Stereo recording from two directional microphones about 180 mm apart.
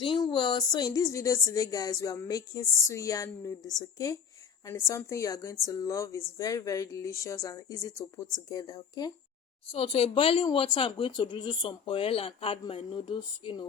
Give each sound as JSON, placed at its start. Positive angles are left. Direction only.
{"t": 0.0, "sound": "a woman's voice", "side_deg": 30}